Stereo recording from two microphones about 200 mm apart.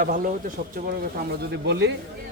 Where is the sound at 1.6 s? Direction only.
55° right (ahead or behind).